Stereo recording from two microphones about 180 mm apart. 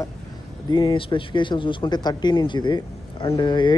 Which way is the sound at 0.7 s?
25° left (ahead or behind).